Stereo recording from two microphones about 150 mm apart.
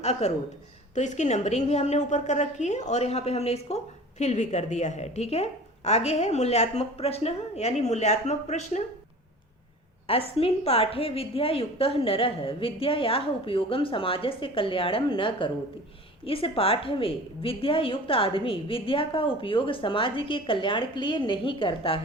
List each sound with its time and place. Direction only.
0.0 s a woman's voice: 45° left (ahead or behind)
10.3 s a woman's voice: 40° left (ahead or behind)